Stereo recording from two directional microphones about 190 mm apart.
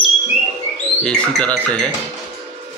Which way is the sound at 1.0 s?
5° left (ahead or behind).